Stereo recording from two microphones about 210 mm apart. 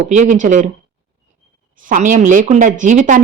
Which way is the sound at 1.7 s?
40° right (ahead or behind).